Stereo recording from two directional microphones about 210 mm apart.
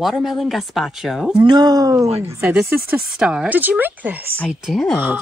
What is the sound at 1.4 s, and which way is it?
A woman's voice, 20° right (ahead or behind).